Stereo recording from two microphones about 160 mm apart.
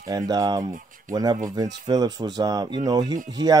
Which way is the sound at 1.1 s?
25° right (ahead or behind).